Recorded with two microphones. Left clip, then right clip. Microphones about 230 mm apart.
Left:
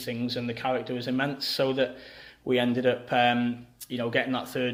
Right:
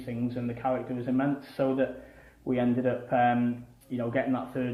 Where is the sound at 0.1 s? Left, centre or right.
Left.